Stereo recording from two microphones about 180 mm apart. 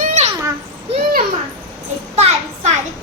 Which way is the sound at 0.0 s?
40° right (ahead or behind).